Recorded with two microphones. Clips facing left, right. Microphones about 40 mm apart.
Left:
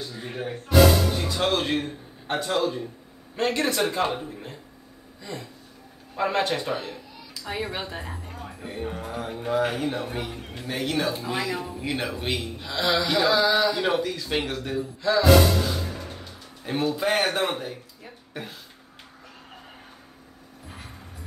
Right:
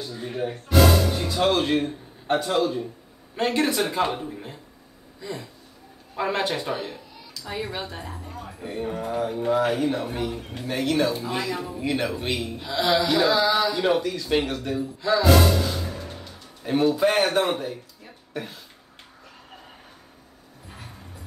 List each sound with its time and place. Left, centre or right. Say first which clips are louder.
0.0 s speech: right 3 dB; centre
7.4 s speech: even; centre
16.6 s speech: right 4 dB; centre
18.0 s a sound: right 3 dB; centre